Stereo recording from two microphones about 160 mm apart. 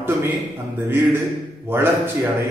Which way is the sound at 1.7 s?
15° right (ahead or behind).